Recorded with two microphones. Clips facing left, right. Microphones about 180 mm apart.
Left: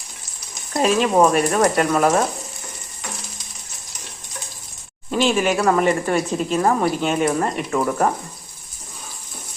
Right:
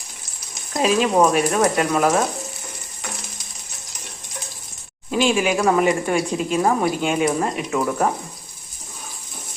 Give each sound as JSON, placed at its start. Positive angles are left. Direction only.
{"t": 0.7, "sound": "a woman's voice", "side_deg": 0}
{"t": 5.1, "sound": "a woman's voice", "side_deg": -5}